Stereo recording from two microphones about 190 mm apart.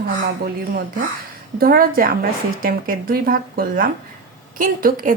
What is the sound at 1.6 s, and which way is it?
Speech, 50° right (ahead or behind).